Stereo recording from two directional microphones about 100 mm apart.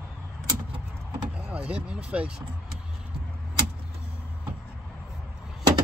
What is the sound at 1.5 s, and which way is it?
Speech, 15° right (ahead or behind).